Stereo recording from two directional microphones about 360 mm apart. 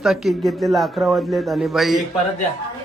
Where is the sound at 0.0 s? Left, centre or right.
Centre.